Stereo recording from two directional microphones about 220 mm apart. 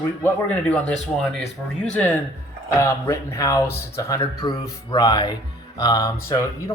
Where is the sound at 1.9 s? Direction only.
5° left (ahead or behind).